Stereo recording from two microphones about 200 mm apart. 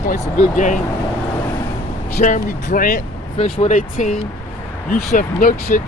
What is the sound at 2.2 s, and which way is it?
Speech, 40° left (ahead or behind).